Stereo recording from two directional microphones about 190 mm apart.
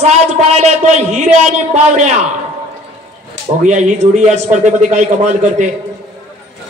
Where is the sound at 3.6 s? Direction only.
40° right (ahead or behind).